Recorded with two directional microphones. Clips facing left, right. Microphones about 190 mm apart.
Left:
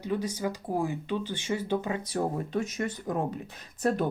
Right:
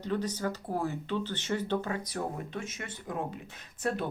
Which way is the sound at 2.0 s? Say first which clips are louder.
Left 5 dB; 35° left (ahead or behind).